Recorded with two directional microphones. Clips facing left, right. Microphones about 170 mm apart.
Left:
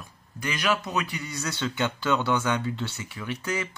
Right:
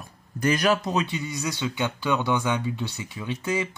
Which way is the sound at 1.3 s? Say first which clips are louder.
Right 2 dB; 15° right (ahead or behind).